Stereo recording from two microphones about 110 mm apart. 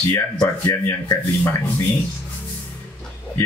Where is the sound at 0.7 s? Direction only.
25° left (ahead or behind).